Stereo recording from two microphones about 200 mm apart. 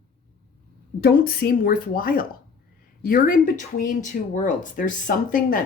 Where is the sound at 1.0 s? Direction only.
50° left (ahead or behind).